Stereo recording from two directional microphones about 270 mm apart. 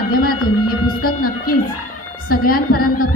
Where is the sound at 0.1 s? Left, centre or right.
Left.